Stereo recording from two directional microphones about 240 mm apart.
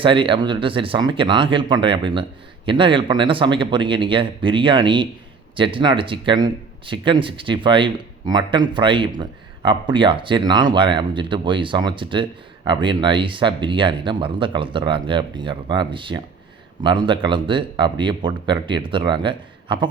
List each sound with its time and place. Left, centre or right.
0.0 s speech: right